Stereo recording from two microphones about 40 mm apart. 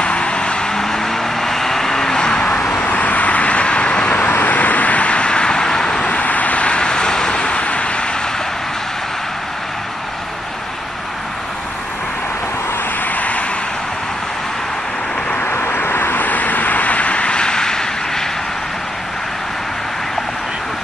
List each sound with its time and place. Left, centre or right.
0.0 s vehicle: left
2.8 s vehicle: left
4.3 s vehicle: left
13.1 s vehicle: left
15.4 s vehicle: left
16.2 s vehicle: left; by 18.2 s centre